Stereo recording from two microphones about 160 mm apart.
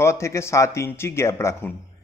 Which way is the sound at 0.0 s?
15° left (ahead or behind).